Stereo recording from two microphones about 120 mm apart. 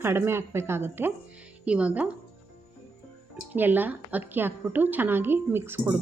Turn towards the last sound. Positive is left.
turn(degrees=-20)  # may be behind; listen again after turning